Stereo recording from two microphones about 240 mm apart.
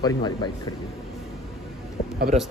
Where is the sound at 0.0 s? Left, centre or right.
Centre.